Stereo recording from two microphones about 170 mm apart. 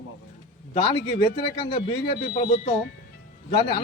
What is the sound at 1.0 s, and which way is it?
Speech, 75° left (ahead or behind).